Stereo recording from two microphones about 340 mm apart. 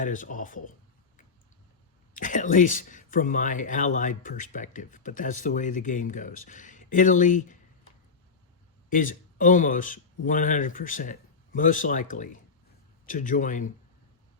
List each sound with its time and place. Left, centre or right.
0.0 s speech: left
2.1 s speech: left
8.9 s speech: left